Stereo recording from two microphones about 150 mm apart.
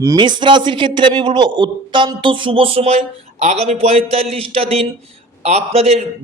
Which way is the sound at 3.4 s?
45° right (ahead or behind).